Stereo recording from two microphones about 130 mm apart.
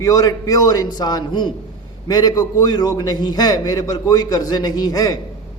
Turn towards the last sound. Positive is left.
turn(degrees=30)  # may be behind; listen again after turning